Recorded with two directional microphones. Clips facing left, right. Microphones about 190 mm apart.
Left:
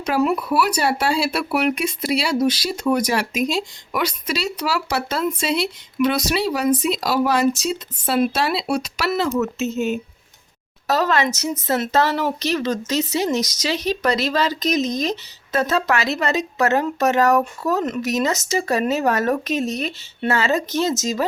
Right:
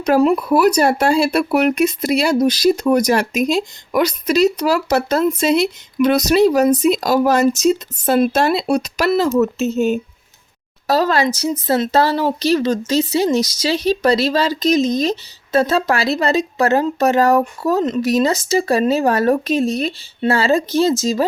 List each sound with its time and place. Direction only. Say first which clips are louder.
0.0 s speech: right 6 dB; 35° right (ahead or behind)